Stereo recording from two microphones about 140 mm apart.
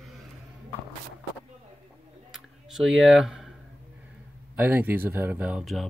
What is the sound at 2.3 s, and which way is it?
Tick, 5° right (ahead or behind).